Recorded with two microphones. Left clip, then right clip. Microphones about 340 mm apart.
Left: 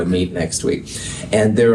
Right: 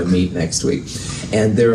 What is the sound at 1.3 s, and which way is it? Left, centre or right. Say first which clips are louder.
Speech: left 1 dB; left.